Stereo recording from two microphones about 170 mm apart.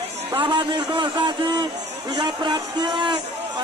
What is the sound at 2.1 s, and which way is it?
A man's voice, 25° right (ahead or behind).